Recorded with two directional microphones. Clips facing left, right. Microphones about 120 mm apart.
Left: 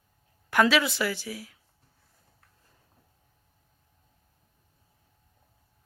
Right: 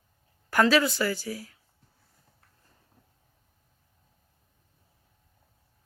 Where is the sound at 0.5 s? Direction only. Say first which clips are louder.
Right 1 dB; centre (ahead or behind).